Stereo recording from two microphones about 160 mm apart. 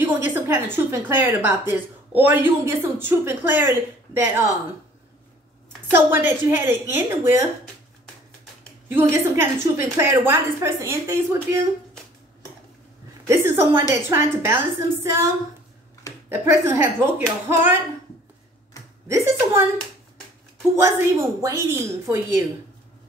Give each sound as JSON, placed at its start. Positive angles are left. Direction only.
{"t": 0.0, "sound": "a woman's voice", "side_deg": -15}
{"t": 5.9, "sound": "a woman's voice", "side_deg": -15}
{"t": 8.8, "sound": "a woman's voice", "side_deg": -15}
{"t": 13.3, "sound": "a woman's voice", "side_deg": -15}
{"t": 16.3, "sound": "a woman's voice", "side_deg": -15}
{"t": 19.0, "sound": "speech", "side_deg": -20}
{"t": 20.7, "sound": "a woman's voice", "side_deg": -20}